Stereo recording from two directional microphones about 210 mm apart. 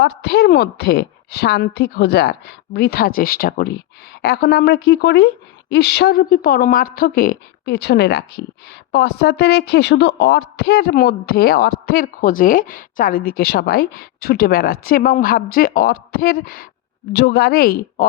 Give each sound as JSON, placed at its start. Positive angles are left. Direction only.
{"t": 0.0, "sound": "speech", "side_deg": 50}